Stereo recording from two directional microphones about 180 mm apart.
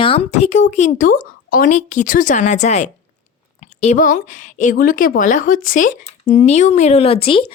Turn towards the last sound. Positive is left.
turn(degrees=30)  # may be behind; listen again after turning